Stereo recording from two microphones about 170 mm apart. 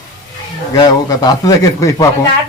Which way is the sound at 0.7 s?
25° left (ahead or behind).